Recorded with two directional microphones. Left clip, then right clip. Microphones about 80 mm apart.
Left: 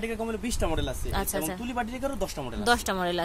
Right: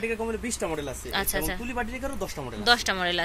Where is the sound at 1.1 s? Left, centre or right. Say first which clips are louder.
Right 4 dB; left.